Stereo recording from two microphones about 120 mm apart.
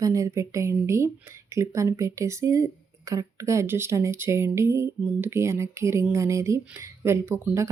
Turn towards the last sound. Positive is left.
turn(degrees=-20)  # may be behind; listen again after turning